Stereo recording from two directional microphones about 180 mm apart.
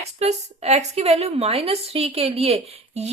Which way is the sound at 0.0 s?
35° right (ahead or behind).